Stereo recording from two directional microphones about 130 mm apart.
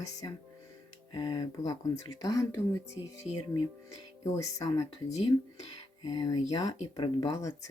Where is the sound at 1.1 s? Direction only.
30° left (ahead or behind).